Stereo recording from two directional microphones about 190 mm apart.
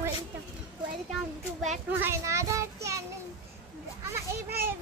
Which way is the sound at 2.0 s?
15° right (ahead or behind).